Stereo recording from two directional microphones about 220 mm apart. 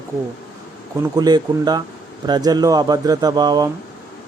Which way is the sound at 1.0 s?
20° right (ahead or behind).